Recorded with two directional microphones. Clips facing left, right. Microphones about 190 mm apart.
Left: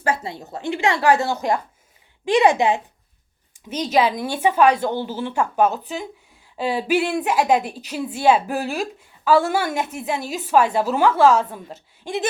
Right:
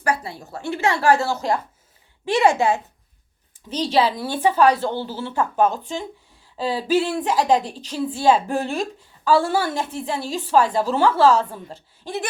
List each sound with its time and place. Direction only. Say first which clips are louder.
0.0 s a woman's voice: even; 25° left (ahead or behind)